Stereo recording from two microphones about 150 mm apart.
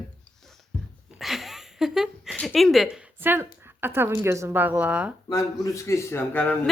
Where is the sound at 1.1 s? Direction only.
Centre (ahead or behind).